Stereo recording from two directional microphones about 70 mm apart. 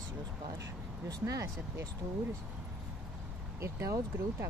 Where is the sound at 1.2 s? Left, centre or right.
Right.